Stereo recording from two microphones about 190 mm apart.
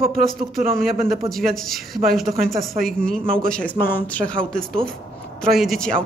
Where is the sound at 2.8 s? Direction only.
5° left (ahead or behind).